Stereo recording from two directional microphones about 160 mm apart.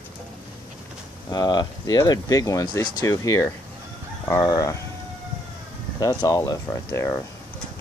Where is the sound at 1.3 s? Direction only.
25° left (ahead or behind).